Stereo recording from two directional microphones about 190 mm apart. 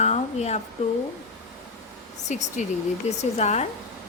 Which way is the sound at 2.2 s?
40° left (ahead or behind).